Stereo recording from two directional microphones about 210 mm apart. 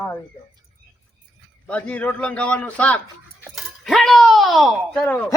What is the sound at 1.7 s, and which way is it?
A man's voice, 5° left (ahead or behind).